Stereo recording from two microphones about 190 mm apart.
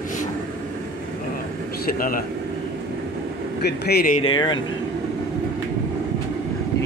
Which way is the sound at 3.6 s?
60° left (ahead or behind).